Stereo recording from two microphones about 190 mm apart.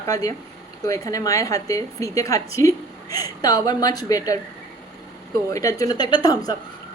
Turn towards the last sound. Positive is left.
turn(degrees=20)  # may be behind; listen again after turning